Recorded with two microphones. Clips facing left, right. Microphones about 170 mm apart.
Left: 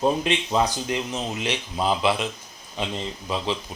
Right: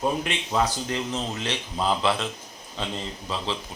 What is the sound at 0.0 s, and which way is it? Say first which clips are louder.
Speech: left 4 dB; 20° left (ahead or behind).